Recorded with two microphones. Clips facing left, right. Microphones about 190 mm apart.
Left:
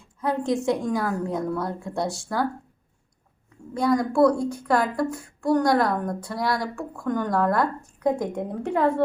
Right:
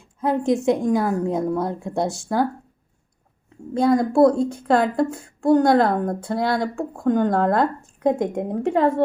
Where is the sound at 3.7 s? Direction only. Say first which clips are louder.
Right 4 dB; 25° right (ahead or behind).